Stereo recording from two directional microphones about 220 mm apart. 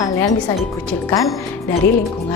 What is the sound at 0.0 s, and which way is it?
Speech, 15° left (ahead or behind).